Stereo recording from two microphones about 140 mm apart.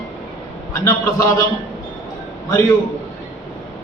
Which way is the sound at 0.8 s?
25° left (ahead or behind).